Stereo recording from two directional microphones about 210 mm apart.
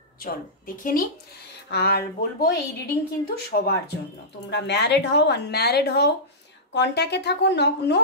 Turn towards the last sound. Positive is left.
turn(degrees=55)  # may be behind; listen again after turning